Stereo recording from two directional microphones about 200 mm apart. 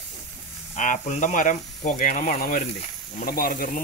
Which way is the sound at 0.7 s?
40° left (ahead or behind).